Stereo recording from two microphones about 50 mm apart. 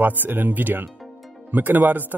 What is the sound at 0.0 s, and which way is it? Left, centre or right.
Speech, right.